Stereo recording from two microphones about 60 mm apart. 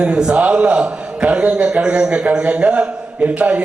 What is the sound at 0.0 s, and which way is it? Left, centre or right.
A man's voice, centre.